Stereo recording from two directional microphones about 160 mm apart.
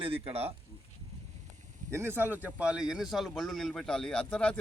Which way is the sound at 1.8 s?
15° right (ahead or behind).